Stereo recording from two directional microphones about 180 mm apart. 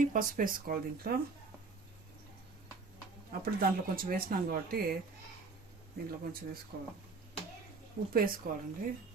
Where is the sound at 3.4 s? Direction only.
55° right (ahead or behind).